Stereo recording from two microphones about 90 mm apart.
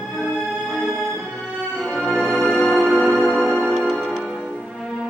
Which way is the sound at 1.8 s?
10° left (ahead or behind).